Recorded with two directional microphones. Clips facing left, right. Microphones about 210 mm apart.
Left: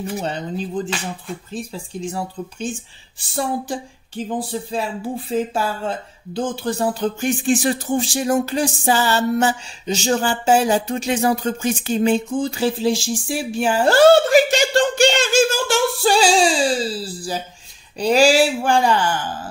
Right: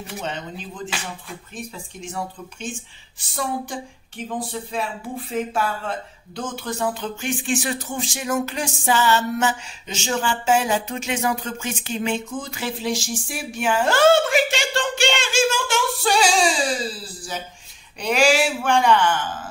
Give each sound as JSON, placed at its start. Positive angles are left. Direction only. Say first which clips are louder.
{"t": 0.2, "sound": "speech", "louder": "left 6 dB", "side_deg": 35}
{"t": 3.2, "sound": "speech", "louder": "left 4 dB", "side_deg": 35}